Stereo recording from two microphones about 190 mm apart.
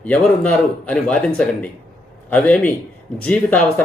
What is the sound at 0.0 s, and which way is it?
Speech, 5° left (ahead or behind).